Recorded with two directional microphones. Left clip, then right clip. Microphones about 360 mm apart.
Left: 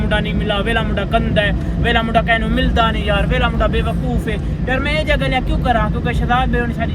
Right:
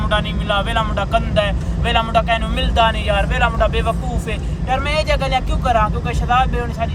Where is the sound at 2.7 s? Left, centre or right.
Right.